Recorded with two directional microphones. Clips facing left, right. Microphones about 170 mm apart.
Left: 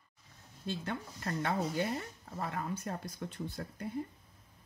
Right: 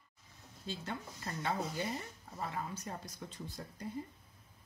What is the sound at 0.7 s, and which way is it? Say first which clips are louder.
Speech: left 4 dB; 60° left (ahead or behind).